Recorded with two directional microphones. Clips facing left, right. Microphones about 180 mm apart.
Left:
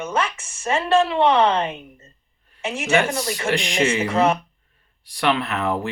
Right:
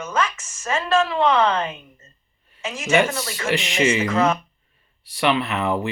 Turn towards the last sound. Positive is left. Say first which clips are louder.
# right 1 dB
turn(degrees=0)  # may be behind; listen again after turning